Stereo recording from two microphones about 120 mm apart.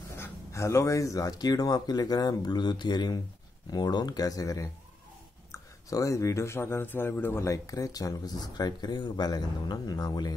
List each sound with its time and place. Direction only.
0.1 s a man's voice: 25° left (ahead or behind)